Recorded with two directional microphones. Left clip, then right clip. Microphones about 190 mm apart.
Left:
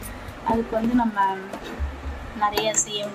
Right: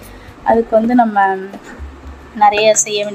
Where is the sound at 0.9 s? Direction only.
50° right (ahead or behind).